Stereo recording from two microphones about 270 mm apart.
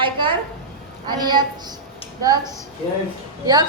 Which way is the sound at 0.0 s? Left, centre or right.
Centre.